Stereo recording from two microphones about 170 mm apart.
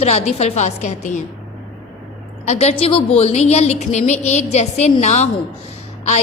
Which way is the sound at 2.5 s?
35° left (ahead or behind).